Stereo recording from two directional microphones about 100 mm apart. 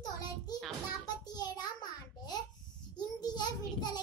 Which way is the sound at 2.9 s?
45° left (ahead or behind).